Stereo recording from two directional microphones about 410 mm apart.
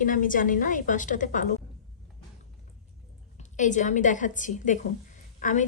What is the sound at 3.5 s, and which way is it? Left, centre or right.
A woman's voice, centre.